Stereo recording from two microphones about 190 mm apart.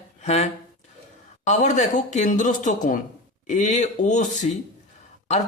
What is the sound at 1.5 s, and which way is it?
Speech, 40° left (ahead or behind).